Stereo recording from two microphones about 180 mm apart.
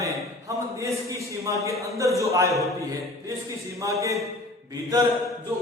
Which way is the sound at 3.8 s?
15° right (ahead or behind).